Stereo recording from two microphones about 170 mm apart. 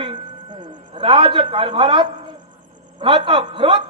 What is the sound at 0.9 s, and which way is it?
A man's voice, 30° right (ahead or behind).